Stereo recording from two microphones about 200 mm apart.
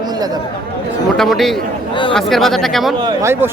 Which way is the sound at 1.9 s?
25° left (ahead or behind).